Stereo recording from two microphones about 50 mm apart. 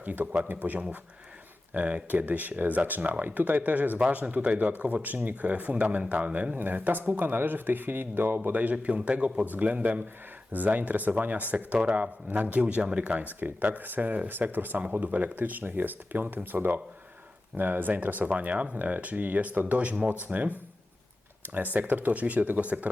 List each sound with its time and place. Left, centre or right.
0.0 s a man's voice: right
8.4 s a man's voice: right